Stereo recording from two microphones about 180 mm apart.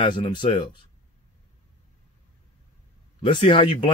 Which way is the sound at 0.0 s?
25° left (ahead or behind).